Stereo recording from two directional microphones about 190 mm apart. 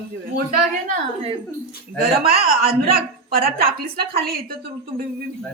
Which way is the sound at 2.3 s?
55° right (ahead or behind).